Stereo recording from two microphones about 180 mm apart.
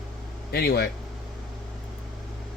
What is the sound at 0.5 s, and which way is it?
Speech, 60° left (ahead or behind).